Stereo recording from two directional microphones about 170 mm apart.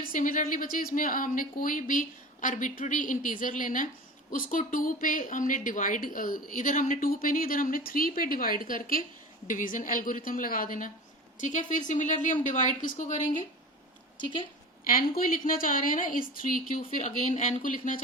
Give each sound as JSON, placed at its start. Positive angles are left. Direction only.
{"t": 0.0, "sound": "a woman's voice", "side_deg": 55}
{"t": 14.2, "sound": "speech", "side_deg": 30}
{"t": 14.8, "sound": "speech", "side_deg": 55}